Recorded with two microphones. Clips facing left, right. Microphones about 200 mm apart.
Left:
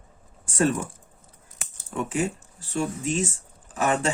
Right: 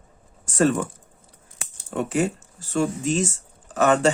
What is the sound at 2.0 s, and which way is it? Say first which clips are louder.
Speech: right 4 dB; 40° right (ahead or behind).